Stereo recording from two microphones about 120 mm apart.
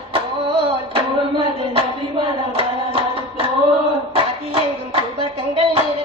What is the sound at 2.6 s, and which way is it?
Music, 50° right (ahead or behind).